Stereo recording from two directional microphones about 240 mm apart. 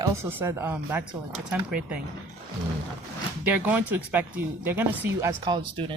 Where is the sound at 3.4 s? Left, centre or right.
Centre.